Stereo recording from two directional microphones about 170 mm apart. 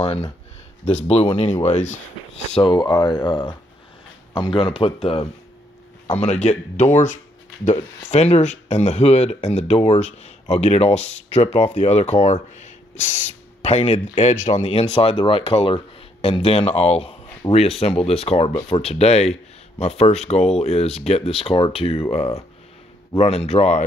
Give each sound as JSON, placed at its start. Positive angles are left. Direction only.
{"t": 0.0, "sound": "speech", "side_deg": 35}
{"t": 2.5, "sound": "speech", "side_deg": 30}
{"t": 23.1, "sound": "speech", "side_deg": 35}